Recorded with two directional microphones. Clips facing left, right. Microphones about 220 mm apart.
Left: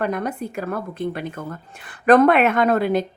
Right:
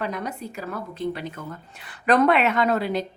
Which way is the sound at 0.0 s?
55° left (ahead or behind).